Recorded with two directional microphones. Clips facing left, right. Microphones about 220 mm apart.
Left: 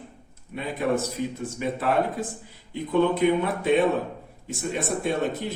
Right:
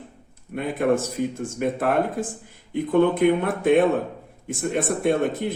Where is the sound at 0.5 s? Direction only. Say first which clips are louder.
Right 4 dB; 55° right (ahead or behind).